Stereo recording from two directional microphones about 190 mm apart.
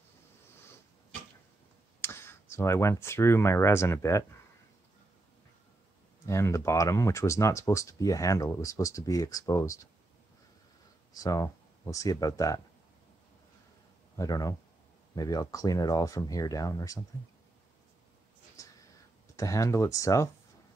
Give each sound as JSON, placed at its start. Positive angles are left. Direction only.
{"t": 2.0, "sound": "speech", "side_deg": 15}
{"t": 6.2, "sound": "speech", "side_deg": 15}
{"t": 11.1, "sound": "speech", "side_deg": 15}
{"t": 14.1, "sound": "speech", "side_deg": 20}
{"t": 18.6, "sound": "a sound", "side_deg": 20}
{"t": 19.3, "sound": "speech", "side_deg": 15}